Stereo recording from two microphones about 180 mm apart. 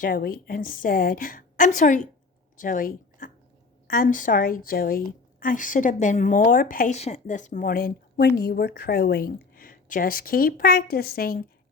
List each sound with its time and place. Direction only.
0.0 s a woman's voice: 50° left (ahead or behind)